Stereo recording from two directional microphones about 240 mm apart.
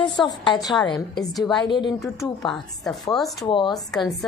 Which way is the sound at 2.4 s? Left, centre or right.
Centre.